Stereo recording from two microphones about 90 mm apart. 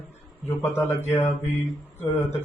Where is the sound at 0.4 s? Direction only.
25° left (ahead or behind).